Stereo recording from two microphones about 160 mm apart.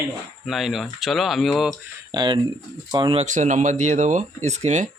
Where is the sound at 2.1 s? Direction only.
30° right (ahead or behind).